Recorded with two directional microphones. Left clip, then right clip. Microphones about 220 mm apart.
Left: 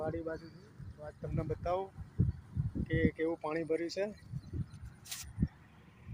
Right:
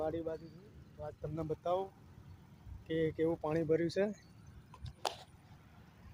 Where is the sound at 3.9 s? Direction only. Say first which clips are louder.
Right 2 dB; 50° right (ahead or behind).